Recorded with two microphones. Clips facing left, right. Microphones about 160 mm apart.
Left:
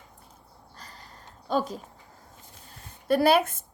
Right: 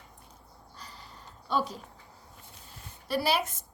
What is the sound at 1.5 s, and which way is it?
Speech, 45° left (ahead or behind).